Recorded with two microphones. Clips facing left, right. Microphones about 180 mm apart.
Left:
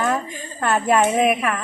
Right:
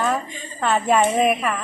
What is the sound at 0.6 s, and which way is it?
Speech, 5° left (ahead or behind).